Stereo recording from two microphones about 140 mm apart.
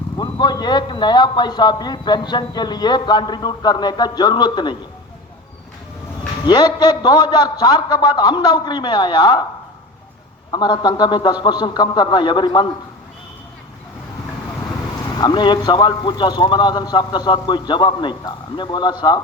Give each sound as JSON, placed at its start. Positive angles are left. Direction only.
{"t": 0.2, "sound": "speech", "side_deg": 30}
{"t": 6.4, "sound": "speech", "side_deg": 30}
{"t": 10.5, "sound": "speech", "side_deg": 30}
{"t": 15.2, "sound": "speech", "side_deg": 30}